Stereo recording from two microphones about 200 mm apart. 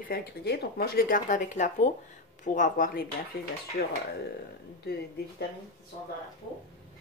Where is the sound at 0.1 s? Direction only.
50° left (ahead or behind).